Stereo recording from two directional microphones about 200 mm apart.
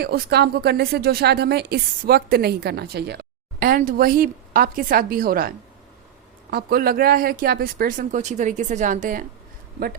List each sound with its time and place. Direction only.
0.0 s speech: 55° right (ahead or behind)